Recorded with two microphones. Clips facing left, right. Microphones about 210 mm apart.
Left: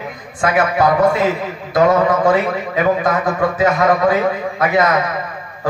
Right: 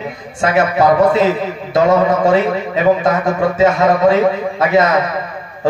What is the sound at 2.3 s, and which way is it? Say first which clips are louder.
A man's voice: right 3 dB; 25° right (ahead or behind).